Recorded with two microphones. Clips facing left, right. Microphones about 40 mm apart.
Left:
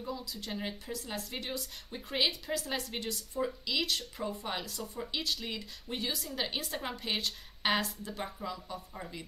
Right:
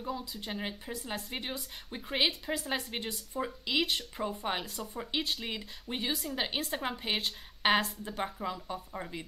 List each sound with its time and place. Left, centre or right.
0.0 s speech: right